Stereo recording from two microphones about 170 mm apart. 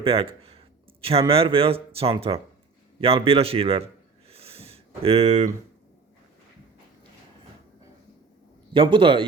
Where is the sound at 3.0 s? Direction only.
35° right (ahead or behind).